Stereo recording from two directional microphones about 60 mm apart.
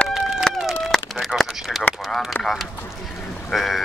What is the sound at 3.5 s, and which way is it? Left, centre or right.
Speech, centre.